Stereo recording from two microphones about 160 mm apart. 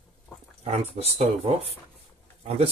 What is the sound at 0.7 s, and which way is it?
Speech, 40° right (ahead or behind).